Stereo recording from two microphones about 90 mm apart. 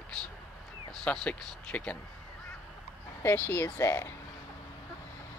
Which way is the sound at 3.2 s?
25° left (ahead or behind).